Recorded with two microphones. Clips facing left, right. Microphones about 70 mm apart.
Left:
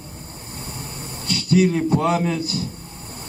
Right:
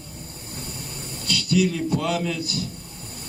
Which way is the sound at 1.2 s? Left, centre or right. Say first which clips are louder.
Left 4 dB; left.